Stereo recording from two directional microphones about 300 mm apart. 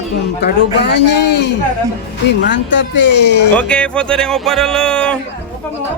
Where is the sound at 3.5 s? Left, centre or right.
Centre.